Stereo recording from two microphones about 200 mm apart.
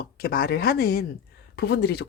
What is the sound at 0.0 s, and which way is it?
Speech, 50° left (ahead or behind).